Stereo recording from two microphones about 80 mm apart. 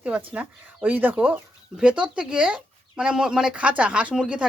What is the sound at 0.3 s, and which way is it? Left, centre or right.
Speech, right.